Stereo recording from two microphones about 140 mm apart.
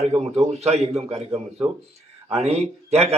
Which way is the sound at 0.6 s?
50° right (ahead or behind).